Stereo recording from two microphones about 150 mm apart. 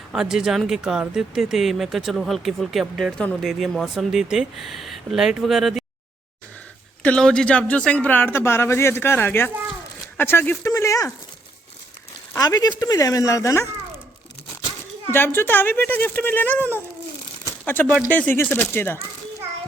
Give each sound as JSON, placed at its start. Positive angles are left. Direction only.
{"t": 0.1, "sound": "speech", "side_deg": -5}
{"t": 7.0, "sound": "speech", "side_deg": 5}
{"t": 12.3, "sound": "speech", "side_deg": 25}
{"t": 15.1, "sound": "speech", "side_deg": 15}
{"t": 17.4, "sound": "crumpling", "side_deg": 10}
{"t": 18.1, "sound": "speech", "side_deg": 10}